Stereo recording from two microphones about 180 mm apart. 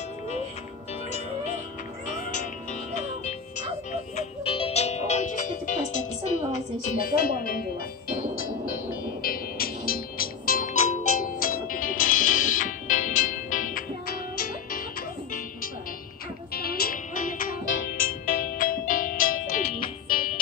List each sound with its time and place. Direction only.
4.2 s music: 30° left (ahead or behind); by 7.6 s 55° left (ahead or behind)
9.2 s music: 55° left (ahead or behind)
16.5 s music: 55° left (ahead or behind)